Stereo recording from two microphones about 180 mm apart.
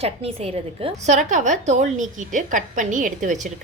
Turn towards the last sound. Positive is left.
turn(degrees=-45)  # may be behind; listen again after turning